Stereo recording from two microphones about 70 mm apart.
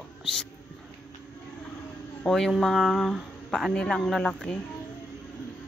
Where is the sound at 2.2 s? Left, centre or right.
Centre.